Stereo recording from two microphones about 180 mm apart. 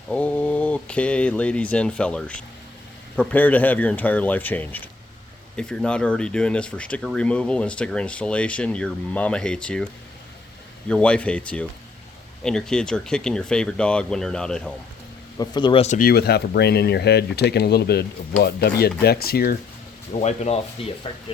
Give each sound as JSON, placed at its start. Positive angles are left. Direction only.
{"t": 0.1, "sound": "speech", "side_deg": 5}
{"t": 15.4, "sound": "speech", "side_deg": 25}
{"t": 16.0, "sound": "speech", "side_deg": 60}
{"t": 20.1, "sound": "speech", "side_deg": 35}